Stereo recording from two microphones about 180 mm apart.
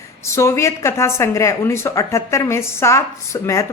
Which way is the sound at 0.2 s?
15° left (ahead or behind).